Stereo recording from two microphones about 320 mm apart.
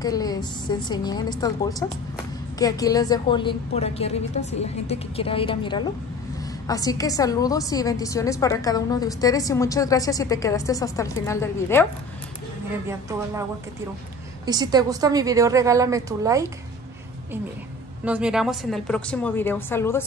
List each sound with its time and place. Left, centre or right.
0.0 s a woman's voice: centre
12.8 s a woman's voice: centre
18.0 s a woman's voice: centre